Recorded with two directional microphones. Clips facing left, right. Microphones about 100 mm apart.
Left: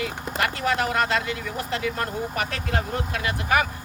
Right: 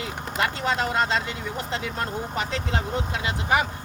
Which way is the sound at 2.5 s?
20° right (ahead or behind).